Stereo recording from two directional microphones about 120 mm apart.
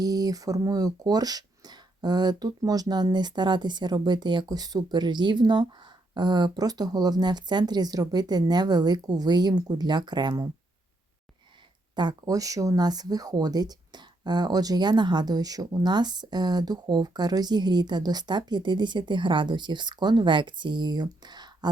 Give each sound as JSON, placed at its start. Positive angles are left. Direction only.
{"t": 0.0, "sound": "speech", "side_deg": -30}
{"t": 11.9, "sound": "speech", "side_deg": -35}